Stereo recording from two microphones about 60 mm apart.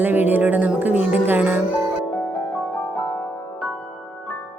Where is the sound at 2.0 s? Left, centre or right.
Left.